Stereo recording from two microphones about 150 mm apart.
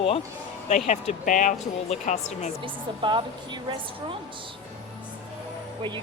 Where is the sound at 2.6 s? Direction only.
35° right (ahead or behind).